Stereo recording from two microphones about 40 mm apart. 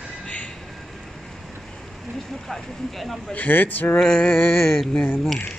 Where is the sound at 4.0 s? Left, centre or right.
Left.